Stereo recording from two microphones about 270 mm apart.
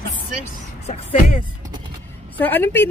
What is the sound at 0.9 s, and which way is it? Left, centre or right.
Speech, left.